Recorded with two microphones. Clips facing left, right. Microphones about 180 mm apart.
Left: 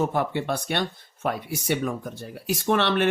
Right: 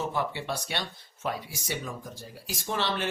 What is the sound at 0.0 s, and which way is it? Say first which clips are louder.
Speech: left 6 dB; 55° left (ahead or behind).